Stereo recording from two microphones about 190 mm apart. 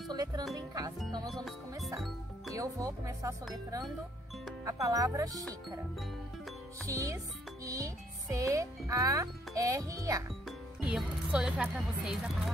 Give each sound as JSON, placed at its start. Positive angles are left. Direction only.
{"t": 0.1, "sound": "music", "side_deg": -20}
{"t": 0.6, "sound": "speech", "side_deg": -20}
{"t": 1.2, "sound": "speech", "side_deg": 0}
{"t": 2.0, "sound": "music", "side_deg": 0}
{"t": 2.5, "sound": "speech", "side_deg": -15}
{"t": 4.6, "sound": "speech", "side_deg": -15}
{"t": 6.9, "sound": "speech", "side_deg": -15}
{"t": 10.8, "sound": "speech", "side_deg": -5}